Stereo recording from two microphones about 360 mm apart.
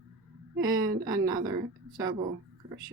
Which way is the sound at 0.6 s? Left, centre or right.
Centre.